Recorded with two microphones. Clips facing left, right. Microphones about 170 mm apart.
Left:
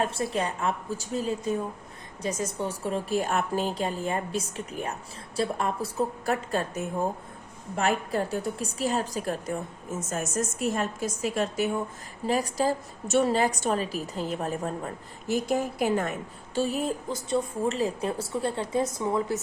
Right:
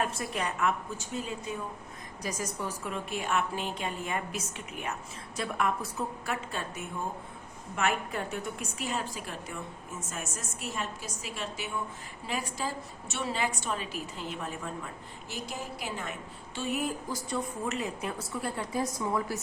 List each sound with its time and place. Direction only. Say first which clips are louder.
0.0 s a woman's voice: left 5 dB; 30° left (ahead or behind)
2.2 s a woman's voice: left 5 dB; 25° left (ahead or behind); by 16.1 s 50° left (ahead or behind)
16.6 s a woman's voice: left 5 dB; 35° left (ahead or behind)